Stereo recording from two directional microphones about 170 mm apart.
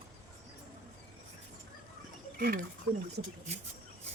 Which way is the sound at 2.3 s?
65° right (ahead or behind).